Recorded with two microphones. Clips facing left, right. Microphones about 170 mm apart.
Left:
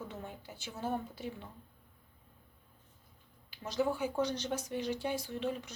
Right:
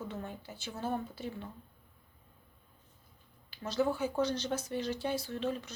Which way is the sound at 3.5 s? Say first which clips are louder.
Right 2 dB; 15° left (ahead or behind).